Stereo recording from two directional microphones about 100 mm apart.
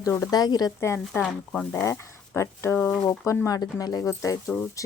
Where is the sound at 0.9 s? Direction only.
15° left (ahead or behind).